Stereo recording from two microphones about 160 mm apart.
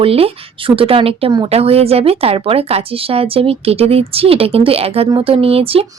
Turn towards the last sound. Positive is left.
turn(degrees=-35)  # may be behind; listen again after turning